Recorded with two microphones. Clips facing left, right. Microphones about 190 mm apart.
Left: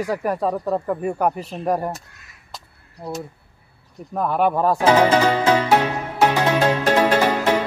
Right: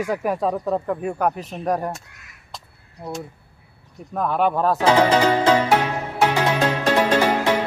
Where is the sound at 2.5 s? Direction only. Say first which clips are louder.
Even; centre (ahead or behind).